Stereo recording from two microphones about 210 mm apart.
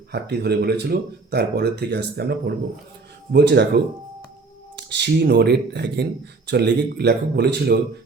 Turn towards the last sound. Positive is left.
turn(degrees=-50)  # may be behind; listen again after turning